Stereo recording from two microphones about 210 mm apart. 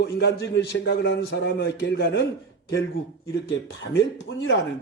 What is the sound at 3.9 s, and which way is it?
Speech, 55° left (ahead or behind).